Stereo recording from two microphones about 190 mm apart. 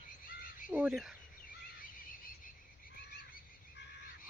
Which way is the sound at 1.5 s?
45° left (ahead or behind).